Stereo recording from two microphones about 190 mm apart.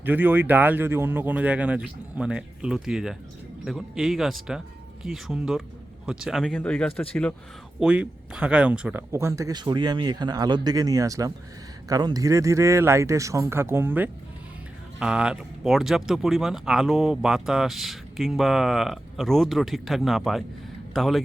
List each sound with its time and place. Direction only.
0.0 s speech: 10° right (ahead or behind); by 7.3 s 5° left (ahead or behind)
7.8 s speech: 5° right (ahead or behind)